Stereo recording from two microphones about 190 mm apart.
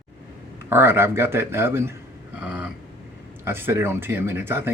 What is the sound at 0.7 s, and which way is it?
Speech, 10° right (ahead or behind).